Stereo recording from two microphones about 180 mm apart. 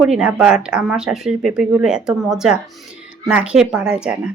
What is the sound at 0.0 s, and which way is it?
Speech, 5° right (ahead or behind).